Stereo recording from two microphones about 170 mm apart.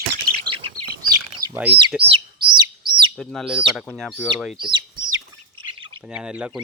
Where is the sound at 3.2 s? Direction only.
5° left (ahead or behind).